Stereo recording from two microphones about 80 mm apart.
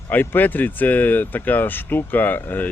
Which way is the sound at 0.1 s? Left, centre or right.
Left.